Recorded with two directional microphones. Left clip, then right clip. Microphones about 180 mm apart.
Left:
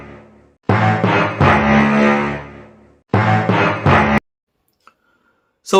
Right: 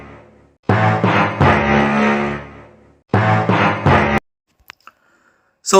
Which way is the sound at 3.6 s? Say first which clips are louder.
Left 1 dB; 20° right (ahead or behind).